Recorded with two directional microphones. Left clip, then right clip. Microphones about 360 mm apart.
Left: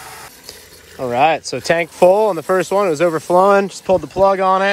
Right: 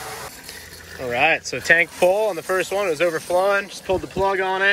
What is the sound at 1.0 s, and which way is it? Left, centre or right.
Speech, centre.